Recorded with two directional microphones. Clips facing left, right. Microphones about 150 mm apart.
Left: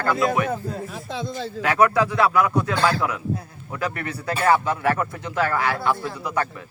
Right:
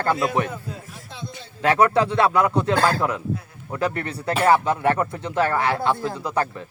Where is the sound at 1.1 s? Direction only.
90° left.